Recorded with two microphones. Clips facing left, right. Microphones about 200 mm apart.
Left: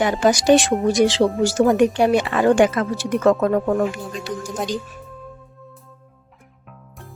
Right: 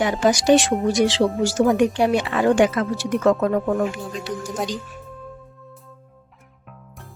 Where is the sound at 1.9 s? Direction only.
50° left (ahead or behind).